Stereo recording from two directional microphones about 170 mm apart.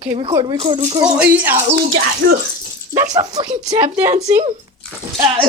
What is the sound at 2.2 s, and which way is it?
Speech, 90° right.